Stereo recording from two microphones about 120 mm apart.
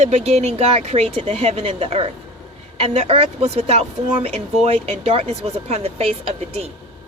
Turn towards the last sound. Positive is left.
turn(degrees=-60)  # may be behind; listen again after turning